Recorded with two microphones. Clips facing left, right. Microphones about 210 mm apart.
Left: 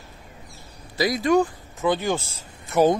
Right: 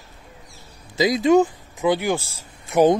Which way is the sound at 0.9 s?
20° right (ahead or behind).